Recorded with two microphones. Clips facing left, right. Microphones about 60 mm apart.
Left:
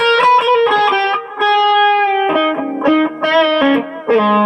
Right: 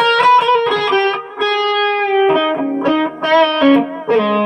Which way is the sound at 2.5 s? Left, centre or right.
Centre.